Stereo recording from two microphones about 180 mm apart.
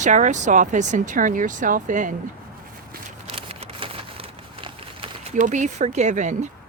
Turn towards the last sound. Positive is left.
turn(degrees=-40)  # may be behind; listen again after turning